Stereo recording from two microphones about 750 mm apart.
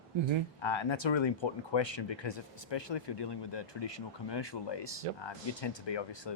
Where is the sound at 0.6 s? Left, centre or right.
Left.